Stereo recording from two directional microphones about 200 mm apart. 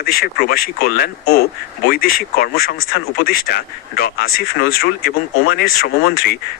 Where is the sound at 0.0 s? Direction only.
50° left (ahead or behind).